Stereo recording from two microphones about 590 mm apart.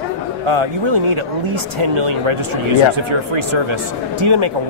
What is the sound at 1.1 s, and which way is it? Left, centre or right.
Speech, right.